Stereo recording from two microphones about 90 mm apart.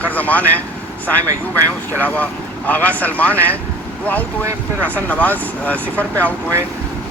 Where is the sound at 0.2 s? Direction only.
15° left (ahead or behind).